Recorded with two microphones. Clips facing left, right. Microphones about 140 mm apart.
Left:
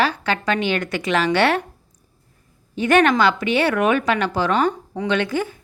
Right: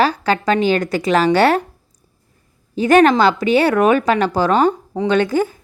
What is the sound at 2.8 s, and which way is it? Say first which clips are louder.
A woman's voice: right 4 dB; 35° right (ahead or behind).